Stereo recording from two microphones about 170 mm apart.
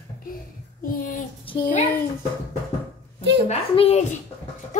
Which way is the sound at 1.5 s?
30° left (ahead or behind).